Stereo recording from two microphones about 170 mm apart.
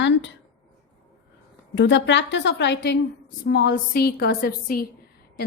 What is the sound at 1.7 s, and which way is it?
A woman's voice, 90° left.